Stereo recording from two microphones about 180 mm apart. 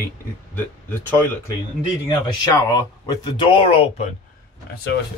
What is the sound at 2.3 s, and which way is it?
Speech, 20° left (ahead or behind).